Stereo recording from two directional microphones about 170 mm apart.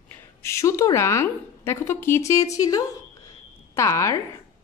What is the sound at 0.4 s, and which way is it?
A woman's voice, 15° left (ahead or behind).